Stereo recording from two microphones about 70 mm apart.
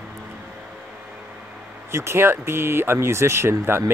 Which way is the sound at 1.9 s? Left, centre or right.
Right.